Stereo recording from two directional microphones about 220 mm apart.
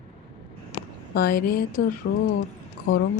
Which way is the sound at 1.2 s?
40° left (ahead or behind).